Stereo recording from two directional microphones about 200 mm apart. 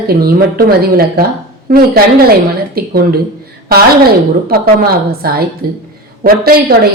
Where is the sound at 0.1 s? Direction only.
50° right (ahead or behind).